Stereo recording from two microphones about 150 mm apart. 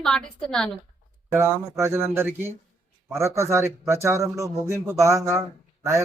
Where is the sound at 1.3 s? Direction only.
15° right (ahead or behind).